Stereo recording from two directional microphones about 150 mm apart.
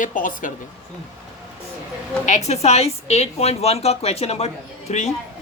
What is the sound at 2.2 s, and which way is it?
Speech, 50° left (ahead or behind).